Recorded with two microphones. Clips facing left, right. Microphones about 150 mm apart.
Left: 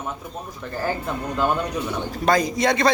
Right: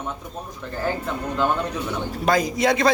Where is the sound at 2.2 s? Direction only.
5° right (ahead or behind).